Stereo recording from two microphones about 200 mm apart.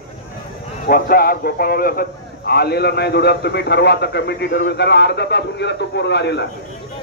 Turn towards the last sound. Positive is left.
turn(degrees=60)  # may be behind; listen again after turning